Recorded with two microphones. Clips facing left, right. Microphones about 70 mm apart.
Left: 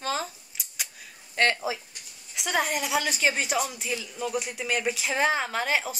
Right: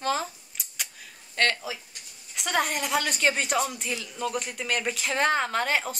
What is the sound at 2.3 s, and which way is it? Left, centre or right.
A woman's voice, centre.